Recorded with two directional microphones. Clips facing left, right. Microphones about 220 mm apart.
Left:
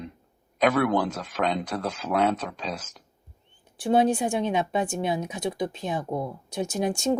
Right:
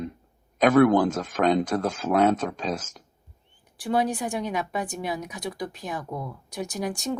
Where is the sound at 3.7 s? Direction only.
25° left (ahead or behind).